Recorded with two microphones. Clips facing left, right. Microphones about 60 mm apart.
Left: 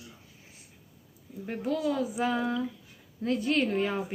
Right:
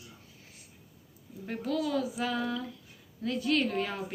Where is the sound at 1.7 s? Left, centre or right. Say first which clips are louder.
Left 2 dB; left.